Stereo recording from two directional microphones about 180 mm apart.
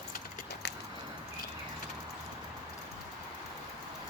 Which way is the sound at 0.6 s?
70° left (ahead or behind).